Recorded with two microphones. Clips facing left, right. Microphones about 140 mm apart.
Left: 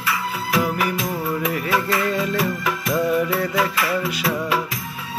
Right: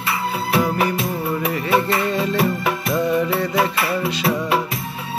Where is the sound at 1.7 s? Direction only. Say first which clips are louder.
Right 4 dB; 25° right (ahead or behind).